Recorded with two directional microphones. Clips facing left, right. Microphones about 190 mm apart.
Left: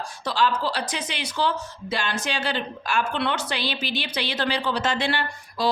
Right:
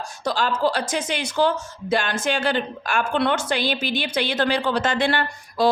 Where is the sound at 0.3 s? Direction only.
45° right (ahead or behind).